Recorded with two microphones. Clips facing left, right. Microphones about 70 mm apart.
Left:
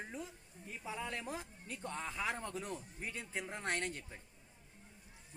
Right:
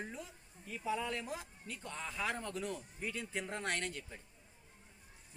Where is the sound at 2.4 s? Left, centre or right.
Left.